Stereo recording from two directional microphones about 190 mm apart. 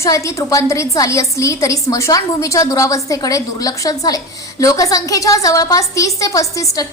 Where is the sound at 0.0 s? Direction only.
15° left (ahead or behind).